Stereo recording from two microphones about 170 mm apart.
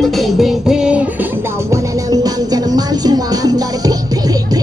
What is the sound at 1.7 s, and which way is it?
Music, 20° right (ahead or behind).